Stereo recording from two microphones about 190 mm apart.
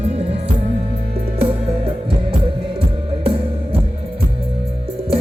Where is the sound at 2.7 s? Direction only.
30° right (ahead or behind).